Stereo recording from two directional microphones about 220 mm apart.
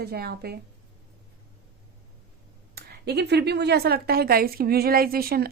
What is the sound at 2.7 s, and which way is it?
A woman's voice, 45° right (ahead or behind).